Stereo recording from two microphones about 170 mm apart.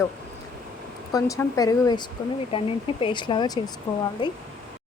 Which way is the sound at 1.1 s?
20° left (ahead or behind).